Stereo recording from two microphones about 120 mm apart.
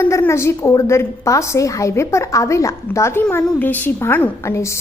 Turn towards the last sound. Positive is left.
turn(degrees=20)  # may be behind; listen again after turning